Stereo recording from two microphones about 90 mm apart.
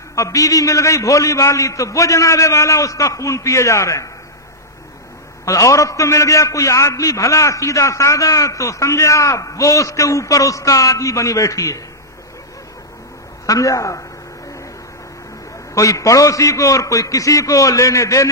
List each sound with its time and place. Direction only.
0.1 s a man's voice: 35° left (ahead or behind)
5.4 s a man's voice: 35° left (ahead or behind)
13.5 s a man's voice: 35° left (ahead or behind)
15.7 s a man's voice: 40° left (ahead or behind)